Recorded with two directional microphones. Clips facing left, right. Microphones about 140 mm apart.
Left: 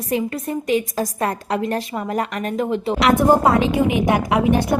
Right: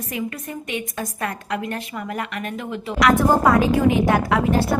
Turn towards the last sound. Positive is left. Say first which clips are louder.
# left 2 dB
turn(degrees=20)  # may be behind; listen again after turning